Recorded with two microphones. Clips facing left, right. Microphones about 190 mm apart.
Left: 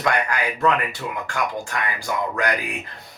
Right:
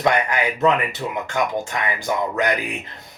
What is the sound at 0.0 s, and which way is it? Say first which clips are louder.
Speech: right 3 dB; 20° right (ahead or behind).